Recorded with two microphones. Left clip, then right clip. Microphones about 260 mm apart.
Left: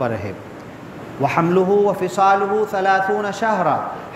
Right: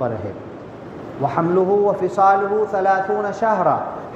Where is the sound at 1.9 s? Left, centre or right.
Left.